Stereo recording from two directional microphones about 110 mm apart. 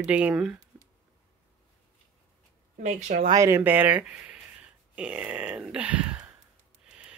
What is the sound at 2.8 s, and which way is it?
Speech, 90° right.